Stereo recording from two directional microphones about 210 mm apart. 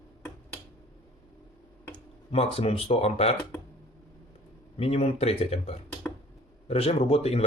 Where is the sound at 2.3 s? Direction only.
30° left (ahead or behind).